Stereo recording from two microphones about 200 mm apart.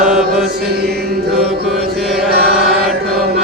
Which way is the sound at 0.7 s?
50° right (ahead or behind).